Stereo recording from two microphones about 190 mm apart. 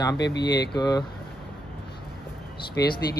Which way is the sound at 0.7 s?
20° left (ahead or behind).